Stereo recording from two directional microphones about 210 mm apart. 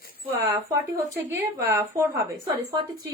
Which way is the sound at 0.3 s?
10° right (ahead or behind).